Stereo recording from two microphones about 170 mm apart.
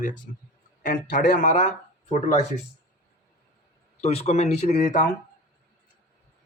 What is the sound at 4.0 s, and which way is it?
Speech, 40° left (ahead or behind).